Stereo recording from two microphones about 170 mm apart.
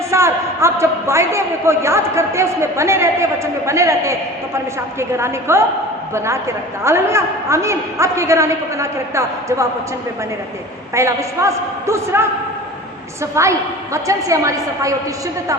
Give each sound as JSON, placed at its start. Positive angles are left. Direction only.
{"t": 0.1, "sound": "a man's voice", "side_deg": -15}
{"t": 10.9, "sound": "a man's voice", "side_deg": -15}
{"t": 13.3, "sound": "a woman's voice", "side_deg": -15}